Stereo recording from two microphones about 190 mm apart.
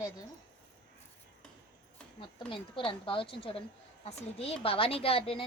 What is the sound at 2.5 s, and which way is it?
A woman's voice, 25° left (ahead or behind).